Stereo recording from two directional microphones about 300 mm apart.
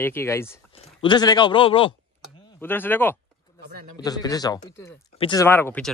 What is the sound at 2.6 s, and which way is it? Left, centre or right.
Speech, centre.